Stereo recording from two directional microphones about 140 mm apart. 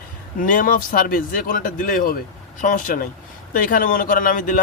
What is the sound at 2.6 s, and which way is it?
Speech, 65° left (ahead or behind).